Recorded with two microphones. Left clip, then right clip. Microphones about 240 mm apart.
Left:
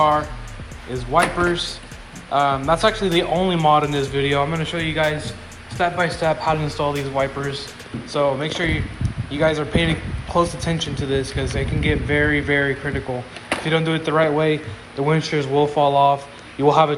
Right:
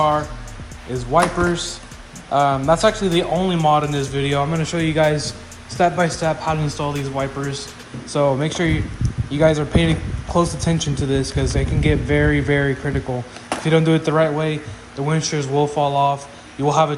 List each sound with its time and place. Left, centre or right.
1.1 s speech: centre
2.3 s speech: right
13.7 s speech: right